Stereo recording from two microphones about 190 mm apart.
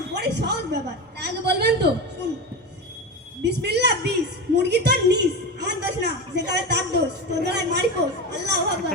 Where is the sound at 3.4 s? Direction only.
60° right (ahead or behind).